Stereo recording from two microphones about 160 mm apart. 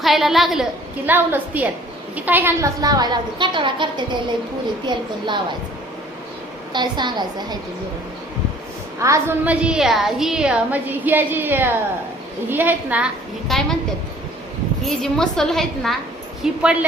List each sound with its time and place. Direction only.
0.0 s a woman's voice: centre (ahead or behind); by 5.4 s 30° right (ahead or behind)
6.7 s a woman's voice: 25° right (ahead or behind)
9.0 s a woman's voice: 20° right (ahead or behind)
13.5 s a woman's voice: centre (ahead or behind)
14.8 s a woman's voice: 5° left (ahead or behind)